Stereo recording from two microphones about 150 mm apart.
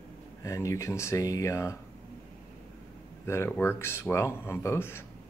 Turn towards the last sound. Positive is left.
turn(degrees=15)  # may be behind; listen again after turning